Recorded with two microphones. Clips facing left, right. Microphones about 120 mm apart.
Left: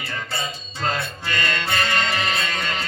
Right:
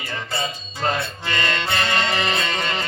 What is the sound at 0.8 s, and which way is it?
Music, 25° right (ahead or behind).